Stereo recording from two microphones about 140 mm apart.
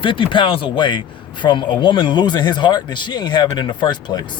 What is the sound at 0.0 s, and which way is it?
A man's voice, 35° left (ahead or behind).